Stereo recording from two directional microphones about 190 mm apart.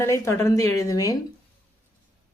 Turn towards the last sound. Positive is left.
turn(degrees=20)  # may be behind; listen again after turning